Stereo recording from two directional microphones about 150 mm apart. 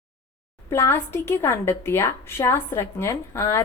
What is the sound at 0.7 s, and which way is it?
A woman's voice, 15° left (ahead or behind).